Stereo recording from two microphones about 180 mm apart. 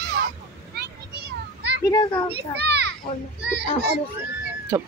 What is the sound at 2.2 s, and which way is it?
A child's voice, 65° right (ahead or behind).